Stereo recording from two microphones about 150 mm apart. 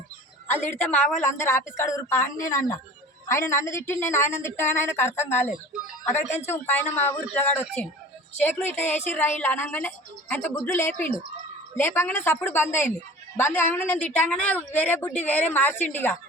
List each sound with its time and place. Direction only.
0.5 s a woman's voice: 10° left (ahead or behind)
6.4 s a woman's voice: 15° left (ahead or behind)